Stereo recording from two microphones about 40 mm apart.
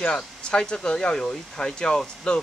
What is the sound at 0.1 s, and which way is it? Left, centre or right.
Speech, left.